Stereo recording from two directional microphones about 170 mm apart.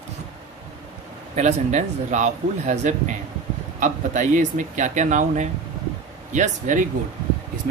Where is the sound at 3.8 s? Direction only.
45° right (ahead or behind).